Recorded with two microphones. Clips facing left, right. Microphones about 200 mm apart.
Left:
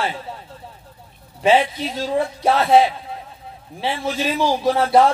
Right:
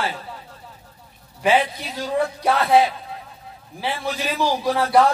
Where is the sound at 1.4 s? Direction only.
25° left (ahead or behind).